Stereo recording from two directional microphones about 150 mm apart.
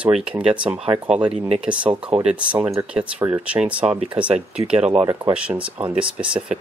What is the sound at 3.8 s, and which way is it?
Speech, 40° right (ahead or behind).